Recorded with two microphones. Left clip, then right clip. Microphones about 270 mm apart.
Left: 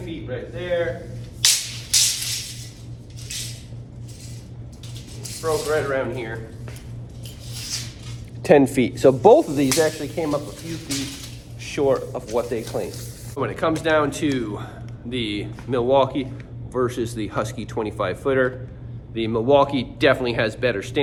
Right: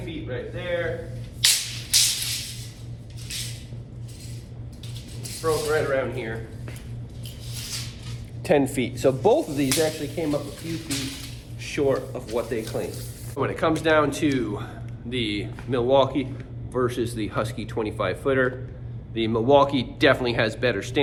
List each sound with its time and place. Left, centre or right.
0.0 s speech: centre
1.4 s music: centre
5.2 s speech: centre
8.4 s speech: left
9.6 s speech: centre
11.6 s speech: centre